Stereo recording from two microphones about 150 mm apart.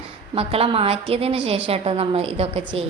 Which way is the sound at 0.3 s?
40° right (ahead or behind).